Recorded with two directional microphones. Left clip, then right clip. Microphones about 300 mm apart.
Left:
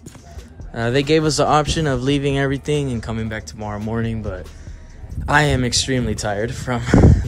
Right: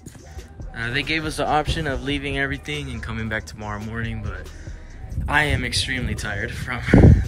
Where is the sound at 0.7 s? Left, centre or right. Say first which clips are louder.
Left 7 dB; centre.